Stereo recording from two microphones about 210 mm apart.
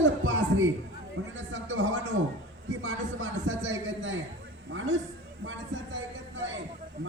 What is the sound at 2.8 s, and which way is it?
Speech, 90° right.